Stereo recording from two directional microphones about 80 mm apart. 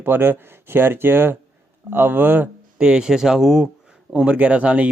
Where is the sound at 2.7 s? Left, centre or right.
Centre.